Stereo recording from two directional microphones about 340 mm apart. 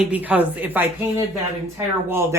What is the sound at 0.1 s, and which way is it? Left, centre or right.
Speech, centre.